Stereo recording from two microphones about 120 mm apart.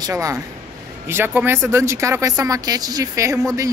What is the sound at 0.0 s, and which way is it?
Speech, 25° right (ahead or behind).